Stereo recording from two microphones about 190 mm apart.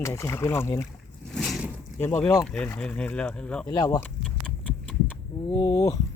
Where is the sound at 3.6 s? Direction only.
20° left (ahead or behind).